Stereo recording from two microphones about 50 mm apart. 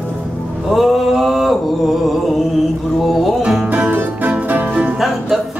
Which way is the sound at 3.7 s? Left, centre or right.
Right.